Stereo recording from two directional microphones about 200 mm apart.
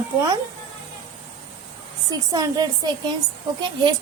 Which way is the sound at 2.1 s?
20° right (ahead or behind).